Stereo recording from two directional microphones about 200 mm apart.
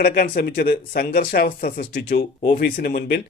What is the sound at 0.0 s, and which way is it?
Speech, 45° left (ahead or behind).